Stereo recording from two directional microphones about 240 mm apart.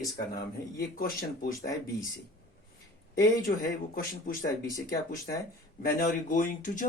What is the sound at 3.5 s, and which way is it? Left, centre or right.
Speech, left.